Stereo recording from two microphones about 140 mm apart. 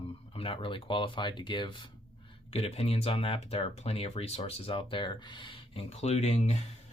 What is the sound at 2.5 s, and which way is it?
Speech, 45° left (ahead or behind).